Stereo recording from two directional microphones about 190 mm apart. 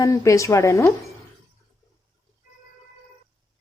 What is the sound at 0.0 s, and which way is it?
Speech, 15° left (ahead or behind).